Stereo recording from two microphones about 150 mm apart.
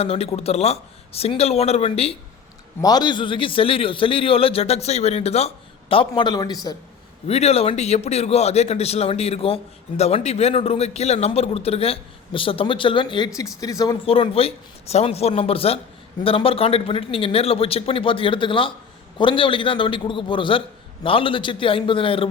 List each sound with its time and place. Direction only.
0.0 s a man's voice: 40° left (ahead or behind)
2.8 s a man's voice: 30° left (ahead or behind); by 5.5 s 45° left (ahead or behind)
5.9 s a man's voice: 35° left (ahead or behind)
7.3 s a man's voice: 45° left (ahead or behind); by 13.9 s 25° left (ahead or behind)
14.0 s a man's voice: 40° left (ahead or behind)